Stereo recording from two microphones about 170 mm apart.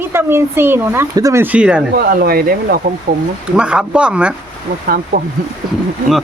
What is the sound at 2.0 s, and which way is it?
Speech, 65° right (ahead or behind).